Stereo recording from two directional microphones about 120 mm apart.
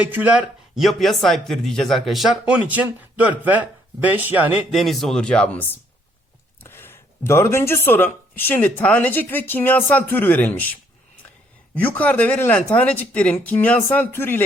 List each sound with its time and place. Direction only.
0.0 s speech: 15° right (ahead or behind)
0.8 s speech: centre (ahead or behind)
4.7 s speech: centre (ahead or behind); by 14.4 s 20° left (ahead or behind)